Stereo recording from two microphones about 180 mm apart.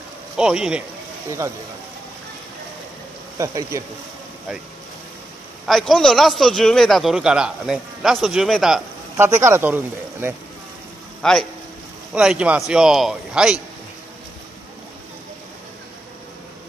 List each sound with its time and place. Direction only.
0.4 s a man's voice: 5° right (ahead or behind)
3.3 s speech: 15° right (ahead or behind)
5.7 s a man's voice: centre (ahead or behind)
9.1 s speech: 15° right (ahead or behind)
11.2 s a man's voice: 5° left (ahead or behind)